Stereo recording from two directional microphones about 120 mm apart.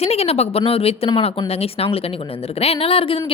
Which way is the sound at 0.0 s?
60° left (ahead or behind).